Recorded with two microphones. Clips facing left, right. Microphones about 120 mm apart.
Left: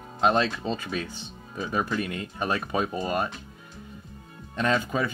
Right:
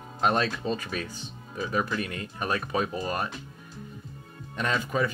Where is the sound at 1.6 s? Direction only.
25° left (ahead or behind).